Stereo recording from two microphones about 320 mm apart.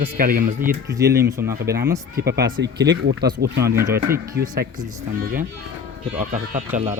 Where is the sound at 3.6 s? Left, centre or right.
Centre.